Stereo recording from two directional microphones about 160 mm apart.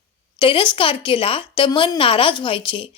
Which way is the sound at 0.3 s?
35° left (ahead or behind).